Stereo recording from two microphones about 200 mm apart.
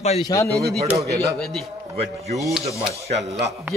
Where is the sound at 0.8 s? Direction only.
15° right (ahead or behind).